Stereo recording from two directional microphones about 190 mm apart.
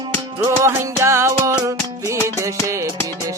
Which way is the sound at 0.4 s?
15° right (ahead or behind).